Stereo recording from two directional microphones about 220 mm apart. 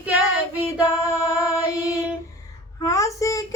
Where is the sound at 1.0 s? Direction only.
15° left (ahead or behind).